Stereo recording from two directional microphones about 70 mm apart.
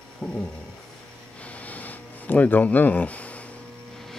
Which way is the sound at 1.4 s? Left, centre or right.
Left.